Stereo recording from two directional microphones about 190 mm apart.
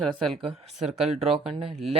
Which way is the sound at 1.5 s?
30° right (ahead or behind).